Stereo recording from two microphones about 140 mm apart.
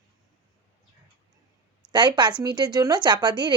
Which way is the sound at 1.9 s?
35° right (ahead or behind).